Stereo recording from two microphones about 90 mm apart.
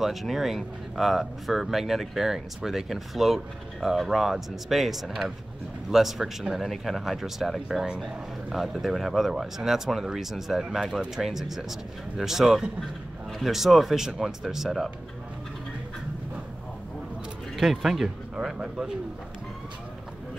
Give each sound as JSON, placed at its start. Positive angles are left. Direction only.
{"t": 0.0, "sound": "speech", "side_deg": 0}
{"t": 17.6, "sound": "speech", "side_deg": 0}